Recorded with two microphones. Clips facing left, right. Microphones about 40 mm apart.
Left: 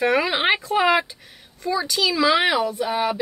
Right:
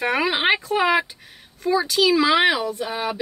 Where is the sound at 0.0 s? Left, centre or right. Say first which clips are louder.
Left 1 dB; centre.